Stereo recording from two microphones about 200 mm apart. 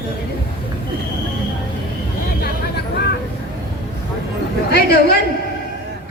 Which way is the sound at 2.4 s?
55° left (ahead or behind).